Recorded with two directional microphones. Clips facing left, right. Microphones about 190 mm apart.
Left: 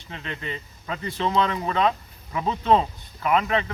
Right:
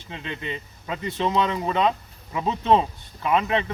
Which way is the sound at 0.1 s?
20° right (ahead or behind).